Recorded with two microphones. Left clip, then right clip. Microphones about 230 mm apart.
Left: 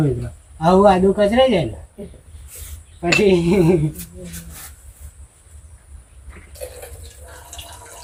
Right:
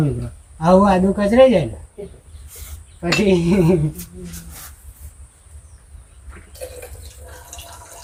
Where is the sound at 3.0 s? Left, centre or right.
Centre.